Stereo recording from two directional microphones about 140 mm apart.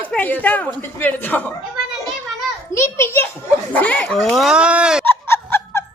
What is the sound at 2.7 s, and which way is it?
A child's voice, 20° left (ahead or behind).